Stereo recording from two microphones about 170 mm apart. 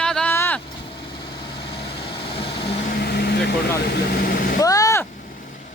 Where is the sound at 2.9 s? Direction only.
70° left (ahead or behind).